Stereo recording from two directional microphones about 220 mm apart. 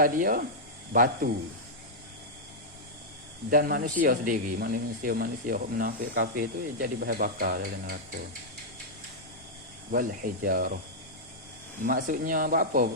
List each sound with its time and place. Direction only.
0.0 s speech: 40° right (ahead or behind)
3.5 s speech: 40° right (ahead or behind)
9.9 s speech: 40° right (ahead or behind)
11.8 s speech: 35° right (ahead or behind)